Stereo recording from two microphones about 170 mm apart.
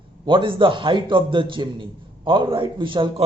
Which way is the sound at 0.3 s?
30° right (ahead or behind).